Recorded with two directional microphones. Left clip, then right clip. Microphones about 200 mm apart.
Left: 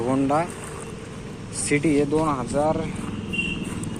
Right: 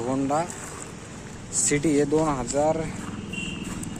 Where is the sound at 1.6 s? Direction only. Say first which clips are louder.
Left 2 dB; 20° right (ahead or behind).